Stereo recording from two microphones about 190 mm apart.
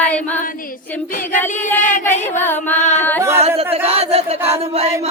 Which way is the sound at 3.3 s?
30° right (ahead or behind).